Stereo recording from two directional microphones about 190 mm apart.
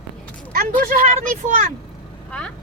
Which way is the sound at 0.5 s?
50° right (ahead or behind).